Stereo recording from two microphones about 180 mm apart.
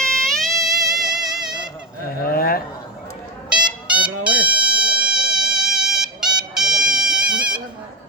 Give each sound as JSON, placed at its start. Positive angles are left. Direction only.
{"t": 0.0, "sound": "music", "side_deg": 5}
{"t": 2.2, "sound": "a sound", "side_deg": 55}
{"t": 3.5, "sound": "music", "side_deg": -5}